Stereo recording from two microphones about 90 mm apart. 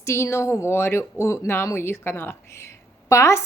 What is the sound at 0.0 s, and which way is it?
Speech, 30° left (ahead or behind).